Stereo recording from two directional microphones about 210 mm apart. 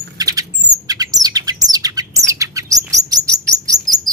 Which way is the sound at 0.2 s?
15° right (ahead or behind).